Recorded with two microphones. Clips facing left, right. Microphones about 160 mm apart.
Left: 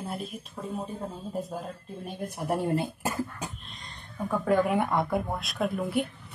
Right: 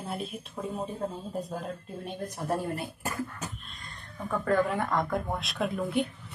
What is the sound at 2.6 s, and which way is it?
Speech, 25° left (ahead or behind).